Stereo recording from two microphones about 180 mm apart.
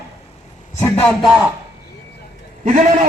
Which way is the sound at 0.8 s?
5° left (ahead or behind).